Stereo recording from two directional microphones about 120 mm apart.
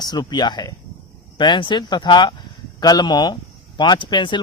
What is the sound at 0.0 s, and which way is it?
Speech, 35° left (ahead or behind).